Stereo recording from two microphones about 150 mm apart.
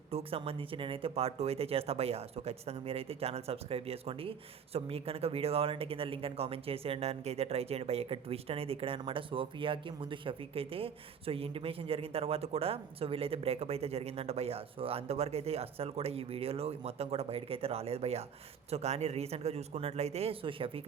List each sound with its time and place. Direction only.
0.1 s speech: 40° right (ahead or behind)